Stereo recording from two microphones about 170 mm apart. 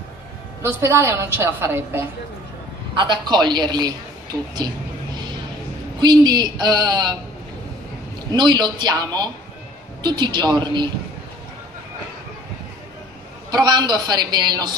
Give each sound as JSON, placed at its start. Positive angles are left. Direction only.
{"t": 0.6, "sound": "a woman's voice", "side_deg": -15}
{"t": 2.9, "sound": "a man's voice", "side_deg": -25}
{"t": 8.3, "sound": "a man's voice", "side_deg": -25}
{"t": 13.5, "sound": "a man's voice", "side_deg": -25}